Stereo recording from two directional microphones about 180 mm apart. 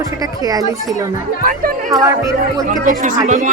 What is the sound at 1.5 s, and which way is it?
Speech, 45° right (ahead or behind).